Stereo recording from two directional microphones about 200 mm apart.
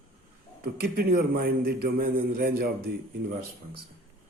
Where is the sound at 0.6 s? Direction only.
50° right (ahead or behind).